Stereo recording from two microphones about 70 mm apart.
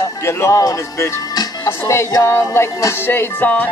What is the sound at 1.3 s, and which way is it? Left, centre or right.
Music, left.